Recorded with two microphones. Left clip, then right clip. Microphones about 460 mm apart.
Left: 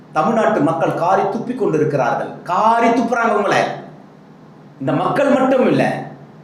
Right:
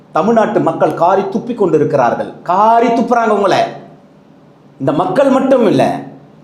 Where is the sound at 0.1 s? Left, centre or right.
Right.